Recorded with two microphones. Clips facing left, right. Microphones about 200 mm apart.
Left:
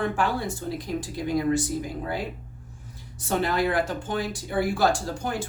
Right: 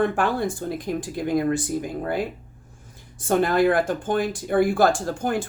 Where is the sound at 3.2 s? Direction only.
50° right (ahead or behind).